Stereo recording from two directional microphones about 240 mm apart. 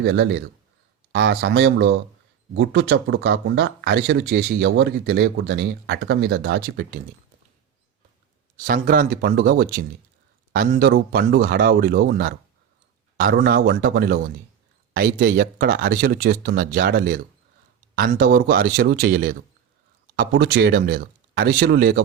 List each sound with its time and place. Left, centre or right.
0.0 s speech: right
8.5 s speech: right